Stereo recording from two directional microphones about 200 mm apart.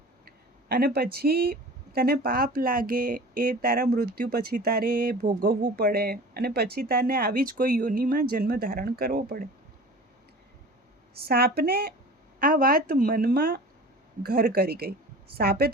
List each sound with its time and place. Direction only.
0.3 s speech: 50° right (ahead or behind)
11.1 s speech: 50° right (ahead or behind)